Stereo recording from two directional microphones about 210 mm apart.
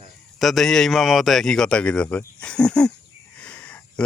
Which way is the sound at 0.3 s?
Centre (ahead or behind).